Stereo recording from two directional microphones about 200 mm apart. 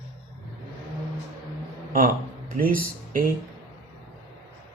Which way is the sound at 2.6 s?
45° right (ahead or behind).